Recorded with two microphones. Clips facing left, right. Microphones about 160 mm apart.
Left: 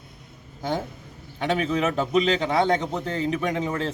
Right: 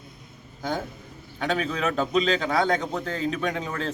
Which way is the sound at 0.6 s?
25° left (ahead or behind).